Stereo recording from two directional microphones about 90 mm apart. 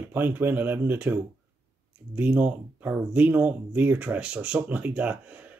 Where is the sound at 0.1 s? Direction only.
25° right (ahead or behind).